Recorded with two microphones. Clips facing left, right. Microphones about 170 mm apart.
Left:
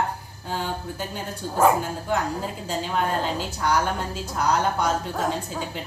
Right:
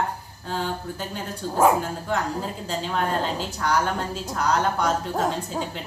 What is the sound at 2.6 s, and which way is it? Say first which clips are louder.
A woman's voice: left 1 dB; 5° left (ahead or behind).